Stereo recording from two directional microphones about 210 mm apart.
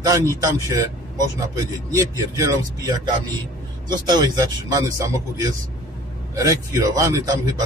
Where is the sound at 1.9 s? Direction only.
15° right (ahead or behind).